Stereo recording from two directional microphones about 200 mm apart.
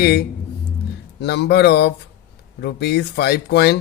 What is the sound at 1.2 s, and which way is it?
Speech, 55° left (ahead or behind).